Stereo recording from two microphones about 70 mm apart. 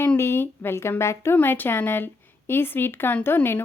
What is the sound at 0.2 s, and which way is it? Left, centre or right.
Speech, left.